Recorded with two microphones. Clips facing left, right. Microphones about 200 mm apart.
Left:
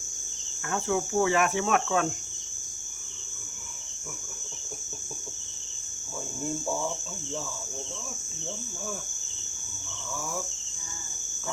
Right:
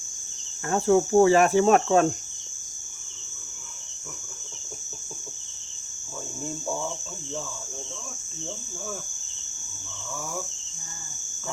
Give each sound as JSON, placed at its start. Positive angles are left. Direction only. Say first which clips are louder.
{"t": 0.7, "sound": "cricket", "louder": "right 8 dB", "side_deg": -35}